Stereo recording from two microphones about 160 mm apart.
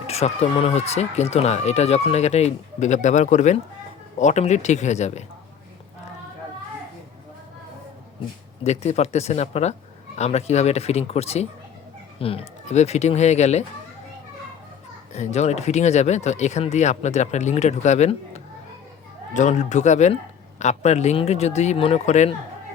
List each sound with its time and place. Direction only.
0.1 s speech: 40° left (ahead or behind)
8.6 s speech: 45° left (ahead or behind)
15.1 s speech: 45° left (ahead or behind)